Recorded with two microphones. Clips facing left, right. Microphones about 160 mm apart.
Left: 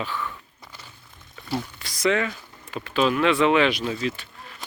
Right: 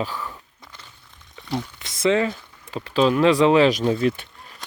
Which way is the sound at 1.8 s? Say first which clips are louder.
Right 4 dB; 25° right (ahead or behind).